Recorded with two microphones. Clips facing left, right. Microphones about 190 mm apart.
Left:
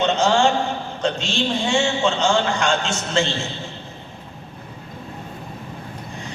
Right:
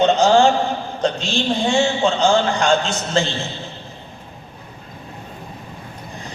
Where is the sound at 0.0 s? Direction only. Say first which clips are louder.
Right 5 dB; 35° right (ahead or behind).